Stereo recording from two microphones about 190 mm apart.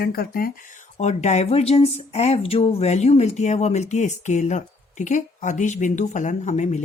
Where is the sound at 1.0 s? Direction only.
35° left (ahead or behind).